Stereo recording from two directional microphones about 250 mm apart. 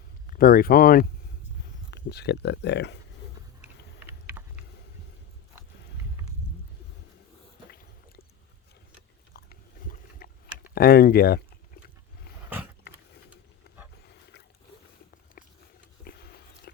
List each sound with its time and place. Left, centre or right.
0.3 s speech: left
4.0 s vehicle: centre
7.7 s squish: left
9.3 s biting: left
10.8 s a sound: left
13.7 s wild animals: left
16.0 s biting: left